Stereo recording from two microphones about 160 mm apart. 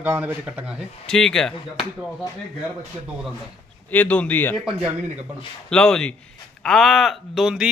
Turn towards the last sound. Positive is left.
turn(degrees=-5)  # may be behind; listen again after turning